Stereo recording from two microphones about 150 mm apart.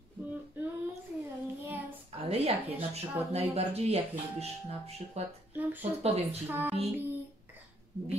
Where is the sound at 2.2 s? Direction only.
40° right (ahead or behind).